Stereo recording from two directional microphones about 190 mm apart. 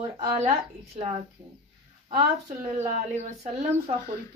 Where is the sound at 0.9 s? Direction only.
35° right (ahead or behind).